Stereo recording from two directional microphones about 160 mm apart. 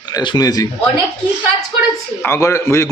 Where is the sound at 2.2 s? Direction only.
15° left (ahead or behind).